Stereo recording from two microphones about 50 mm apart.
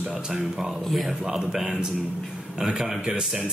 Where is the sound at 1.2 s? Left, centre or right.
Centre.